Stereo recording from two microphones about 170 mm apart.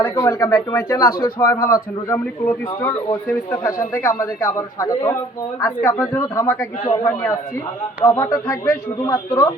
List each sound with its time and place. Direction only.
0.0 s a man's voice: 15° left (ahead or behind)